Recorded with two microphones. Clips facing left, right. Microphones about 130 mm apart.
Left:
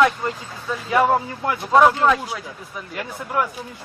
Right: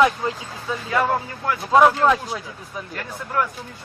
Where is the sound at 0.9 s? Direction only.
20° left (ahead or behind).